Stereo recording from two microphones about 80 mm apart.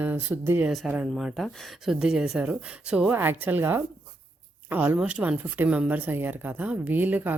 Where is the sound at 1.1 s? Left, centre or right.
Centre.